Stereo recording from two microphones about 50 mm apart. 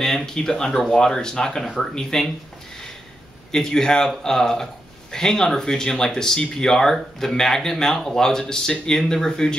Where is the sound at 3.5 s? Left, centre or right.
Centre.